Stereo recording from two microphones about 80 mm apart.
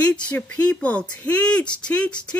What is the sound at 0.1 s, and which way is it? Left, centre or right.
Speech, centre.